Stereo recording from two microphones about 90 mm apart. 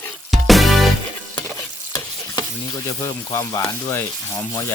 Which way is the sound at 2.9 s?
35° left (ahead or behind).